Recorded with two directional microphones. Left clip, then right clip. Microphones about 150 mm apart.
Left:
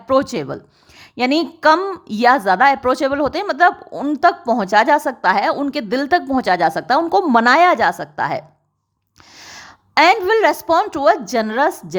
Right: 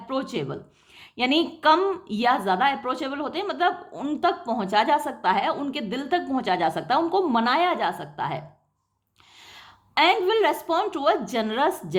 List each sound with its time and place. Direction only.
0.1 s a woman's voice: 50° left (ahead or behind)
1.2 s a woman's voice: 35° left (ahead or behind)
2.8 s a woman's voice: 60° left (ahead or behind); by 4.4 s 45° left (ahead or behind)
4.4 s a woman's voice: 55° left (ahead or behind)
4.8 s a woman's voice: 40° left (ahead or behind)
7.1 s a woman's voice: 55° left (ahead or behind)
9.6 s a woman's voice: 45° left (ahead or behind)